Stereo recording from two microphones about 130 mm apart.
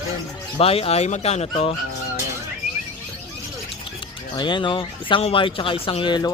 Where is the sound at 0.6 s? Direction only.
50° left (ahead or behind).